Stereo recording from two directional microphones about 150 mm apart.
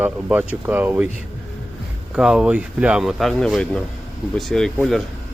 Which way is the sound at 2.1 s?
5° right (ahead or behind).